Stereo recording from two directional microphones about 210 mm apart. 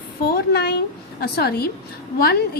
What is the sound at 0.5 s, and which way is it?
A woman's voice, 50° left (ahead or behind).